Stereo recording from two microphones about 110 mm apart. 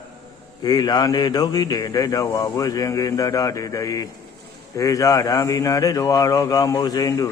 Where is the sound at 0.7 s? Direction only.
35° left (ahead or behind).